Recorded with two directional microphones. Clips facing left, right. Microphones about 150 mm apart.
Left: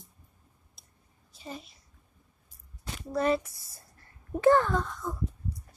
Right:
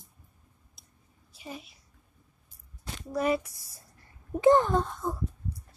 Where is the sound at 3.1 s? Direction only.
10° right (ahead or behind); by 5.1 s 25° right (ahead or behind).